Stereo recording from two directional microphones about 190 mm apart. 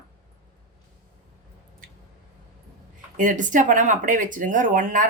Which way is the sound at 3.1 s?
40° right (ahead or behind).